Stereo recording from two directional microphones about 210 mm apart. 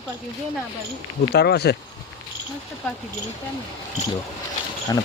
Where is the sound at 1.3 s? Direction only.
50° left (ahead or behind).